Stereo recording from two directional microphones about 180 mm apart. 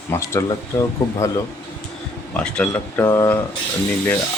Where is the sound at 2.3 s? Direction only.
5° left (ahead or behind).